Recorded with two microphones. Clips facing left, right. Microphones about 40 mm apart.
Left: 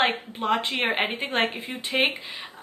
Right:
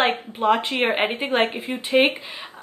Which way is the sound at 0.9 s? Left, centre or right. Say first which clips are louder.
Right 4 dB; centre.